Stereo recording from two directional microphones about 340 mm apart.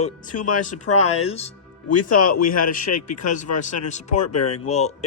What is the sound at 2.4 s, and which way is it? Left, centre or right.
Speech, left.